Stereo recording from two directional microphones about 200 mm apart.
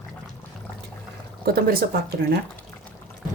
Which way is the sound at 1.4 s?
50° right (ahead or behind).